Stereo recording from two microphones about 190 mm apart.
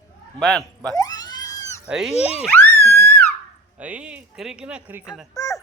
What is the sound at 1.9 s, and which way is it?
Speech, centre (ahead or behind).